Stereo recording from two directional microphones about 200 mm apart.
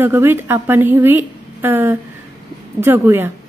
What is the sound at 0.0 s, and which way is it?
A woman's voice, 10° right (ahead or behind).